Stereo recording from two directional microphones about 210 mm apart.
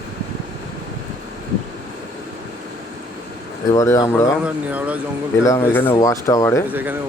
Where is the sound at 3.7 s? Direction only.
15° left (ahead or behind).